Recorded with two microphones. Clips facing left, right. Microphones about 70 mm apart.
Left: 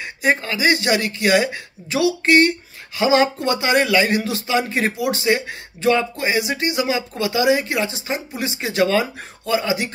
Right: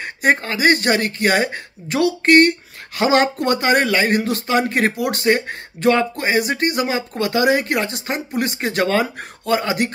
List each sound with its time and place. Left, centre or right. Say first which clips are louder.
0.0 s speech: right 2 dB; right